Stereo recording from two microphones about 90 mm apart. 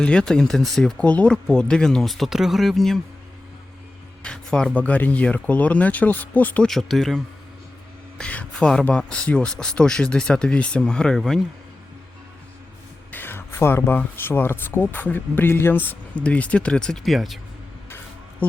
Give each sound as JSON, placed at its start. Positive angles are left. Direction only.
{"t": 0.0, "sound": "speech", "side_deg": 10}
{"t": 4.2, "sound": "speech", "side_deg": 10}
{"t": 6.7, "sound": "speech", "side_deg": 0}
{"t": 8.2, "sound": "speech", "side_deg": 15}
{"t": 13.1, "sound": "speech", "side_deg": 20}
{"t": 17.8, "sound": "a sound", "side_deg": 25}